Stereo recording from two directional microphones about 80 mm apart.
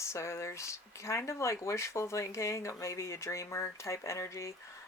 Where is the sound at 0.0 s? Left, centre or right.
Left.